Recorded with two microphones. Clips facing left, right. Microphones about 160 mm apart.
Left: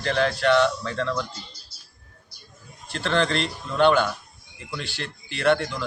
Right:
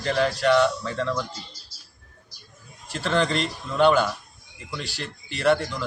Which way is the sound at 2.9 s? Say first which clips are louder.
Even; 5° right (ahead or behind).